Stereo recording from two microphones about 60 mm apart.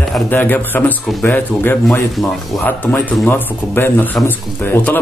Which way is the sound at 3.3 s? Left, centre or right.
Left.